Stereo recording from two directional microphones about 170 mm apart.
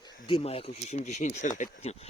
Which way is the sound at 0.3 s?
35° left (ahead or behind).